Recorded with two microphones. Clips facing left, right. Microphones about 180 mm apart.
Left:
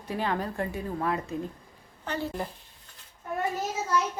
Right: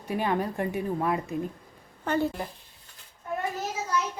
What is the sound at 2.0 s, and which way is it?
Speech, 50° right (ahead or behind).